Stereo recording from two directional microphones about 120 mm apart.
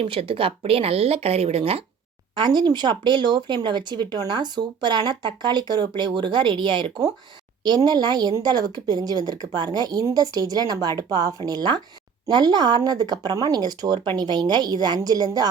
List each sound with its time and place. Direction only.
0.0 s speech: 45° right (ahead or behind)
2.3 s speech: 40° right (ahead or behind)